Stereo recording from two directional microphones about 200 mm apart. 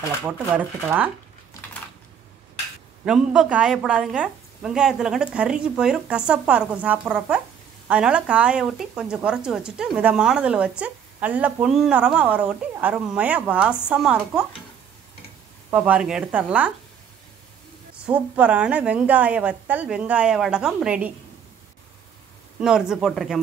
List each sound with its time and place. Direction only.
0.2 s a woman's voice: 10° right (ahead or behind)
3.1 s speech: 5° right (ahead or behind)
15.7 s a woman's voice: 5° right (ahead or behind)
18.0 s a woman's voice: 10° right (ahead or behind)
22.6 s speech: 5° right (ahead or behind)